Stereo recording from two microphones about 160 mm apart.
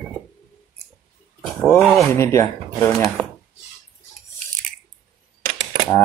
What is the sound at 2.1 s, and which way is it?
Speech, 15° left (ahead or behind).